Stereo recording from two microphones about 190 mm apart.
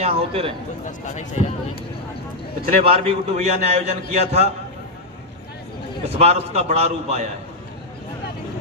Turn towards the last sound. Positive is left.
turn(degrees=-35)  # may be behind; listen again after turning